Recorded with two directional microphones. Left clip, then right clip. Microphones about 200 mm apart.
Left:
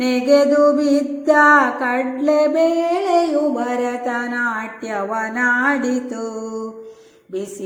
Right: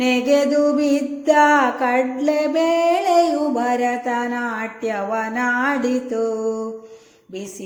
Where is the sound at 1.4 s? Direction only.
30° right (ahead or behind).